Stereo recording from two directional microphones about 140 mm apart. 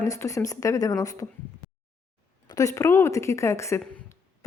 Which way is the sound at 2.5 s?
25° left (ahead or behind).